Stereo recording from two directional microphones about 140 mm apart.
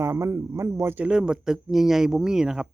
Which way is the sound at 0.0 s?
20° right (ahead or behind).